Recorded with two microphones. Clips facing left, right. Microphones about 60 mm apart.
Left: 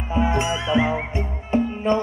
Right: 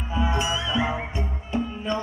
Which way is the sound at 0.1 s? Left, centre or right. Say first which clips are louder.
Left 4 dB; left.